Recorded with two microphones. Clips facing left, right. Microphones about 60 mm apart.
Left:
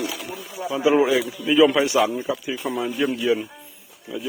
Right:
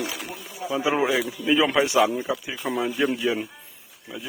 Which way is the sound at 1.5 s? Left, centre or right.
Right.